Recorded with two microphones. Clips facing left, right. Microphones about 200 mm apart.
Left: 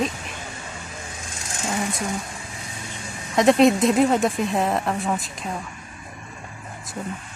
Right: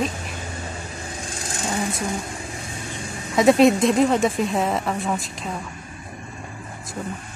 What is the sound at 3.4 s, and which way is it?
A woman's voice, centre (ahead or behind).